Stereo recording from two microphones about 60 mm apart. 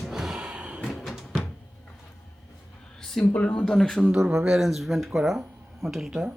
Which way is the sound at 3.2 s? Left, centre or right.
Left.